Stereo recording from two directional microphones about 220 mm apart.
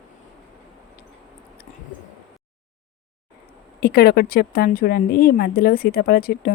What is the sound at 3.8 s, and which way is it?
Speech, 45° left (ahead or behind).